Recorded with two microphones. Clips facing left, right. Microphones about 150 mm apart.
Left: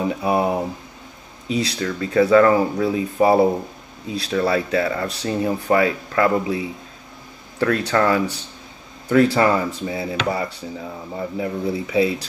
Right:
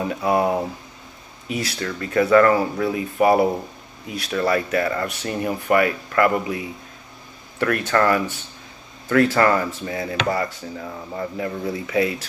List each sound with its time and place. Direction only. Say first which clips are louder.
0.0 s speech: even; 15° left (ahead or behind)
4.3 s speech: left 1 dB; 10° left (ahead or behind)